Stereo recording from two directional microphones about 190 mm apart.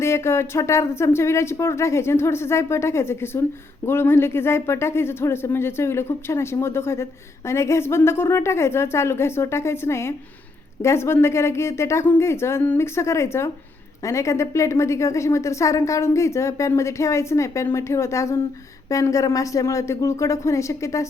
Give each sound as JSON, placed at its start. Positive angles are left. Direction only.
{"t": 0.0, "sound": "speech", "side_deg": 15}